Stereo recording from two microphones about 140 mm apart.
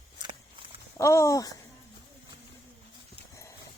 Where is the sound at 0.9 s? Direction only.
20° left (ahead or behind).